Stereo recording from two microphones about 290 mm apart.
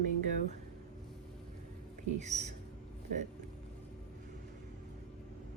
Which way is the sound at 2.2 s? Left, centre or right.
Right.